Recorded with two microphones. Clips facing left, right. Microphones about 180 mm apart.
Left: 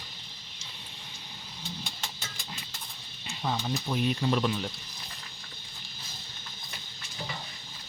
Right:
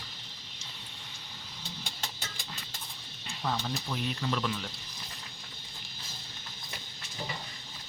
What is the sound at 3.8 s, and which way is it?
Speech, 20° left (ahead or behind).